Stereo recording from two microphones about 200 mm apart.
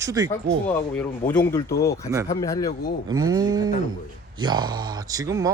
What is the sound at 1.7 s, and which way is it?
Speech, 50° left (ahead or behind).